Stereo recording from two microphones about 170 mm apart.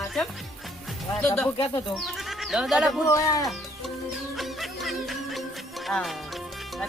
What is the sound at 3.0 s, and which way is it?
Speech, 20° left (ahead or behind).